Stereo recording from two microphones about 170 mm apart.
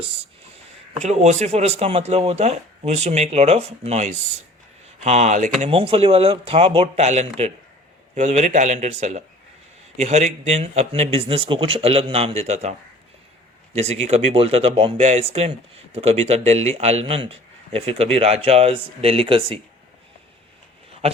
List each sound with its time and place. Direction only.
0.9 s speech: 40° right (ahead or behind)
13.7 s speech: 40° right (ahead or behind)